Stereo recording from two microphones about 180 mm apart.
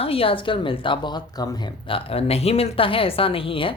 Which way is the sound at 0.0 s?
30° left (ahead or behind).